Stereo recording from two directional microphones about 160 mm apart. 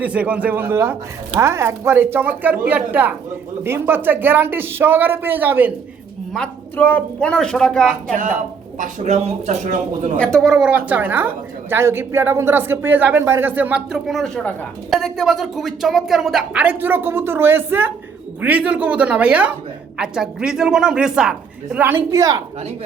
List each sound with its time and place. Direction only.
0.0 s speech: 10° right (ahead or behind)
6.3 s speech: 5° left (ahead or behind)
8.8 s speech: 45° right (ahead or behind)
10.2 s speech: centre (ahead or behind); by 22.4 s 20° right (ahead or behind)